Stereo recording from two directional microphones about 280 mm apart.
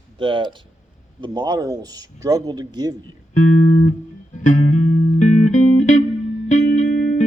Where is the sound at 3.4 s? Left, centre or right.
Left.